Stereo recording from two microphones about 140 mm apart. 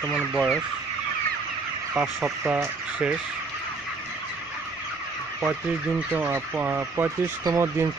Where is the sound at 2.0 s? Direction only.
5° right (ahead or behind).